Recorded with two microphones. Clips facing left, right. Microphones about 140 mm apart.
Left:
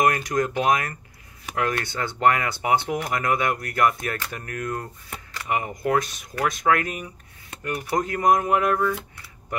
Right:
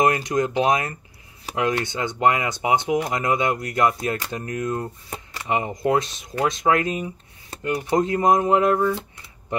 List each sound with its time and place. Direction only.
0.0 s speech: 25° right (ahead or behind)